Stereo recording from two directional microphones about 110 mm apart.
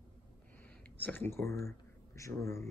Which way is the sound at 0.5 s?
15° left (ahead or behind).